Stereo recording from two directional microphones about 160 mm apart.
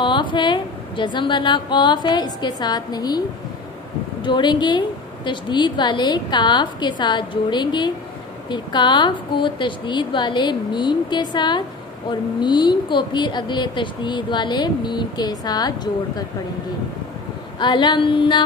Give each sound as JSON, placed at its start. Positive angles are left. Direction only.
{"t": 0.0, "sound": "a woman's voice", "side_deg": 30}
{"t": 17.6, "sound": "a woman's voice", "side_deg": 30}